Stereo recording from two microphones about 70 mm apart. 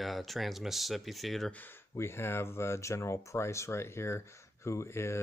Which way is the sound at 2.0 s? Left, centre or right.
Left.